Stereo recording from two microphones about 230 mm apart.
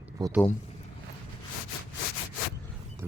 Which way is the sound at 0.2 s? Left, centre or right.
Centre.